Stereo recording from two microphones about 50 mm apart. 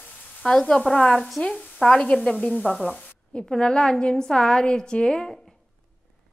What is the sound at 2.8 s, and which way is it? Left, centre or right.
A woman's voice, centre.